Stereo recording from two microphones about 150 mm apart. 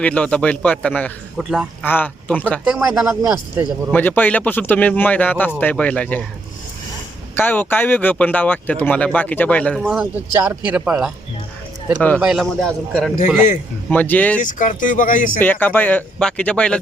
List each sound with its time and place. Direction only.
0.0 s speech: 10° left (ahead or behind)
2.6 s a man's voice: centre (ahead or behind)
3.9 s speech: 10° left (ahead or behind)
7.3 s a man's voice: 15° left (ahead or behind); by 11.1 s 5° right (ahead or behind)
11.9 s speech: 10° left (ahead or behind)
12.2 s a man's voice: centre (ahead or behind)
14.4 s speech: 60° left (ahead or behind)
15.4 s speech: 10° left (ahead or behind)